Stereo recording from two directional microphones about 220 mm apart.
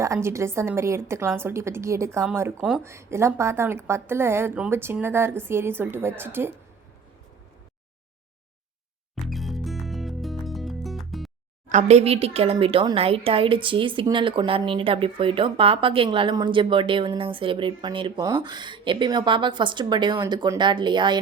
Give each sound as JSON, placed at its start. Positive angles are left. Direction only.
{"t": 0.0, "sound": "a woman's voice", "side_deg": -15}
{"t": 2.8, "sound": "a woman's voice", "side_deg": -10}
{"t": 9.2, "sound": "music", "side_deg": 0}
{"t": 11.7, "sound": "speech", "side_deg": -30}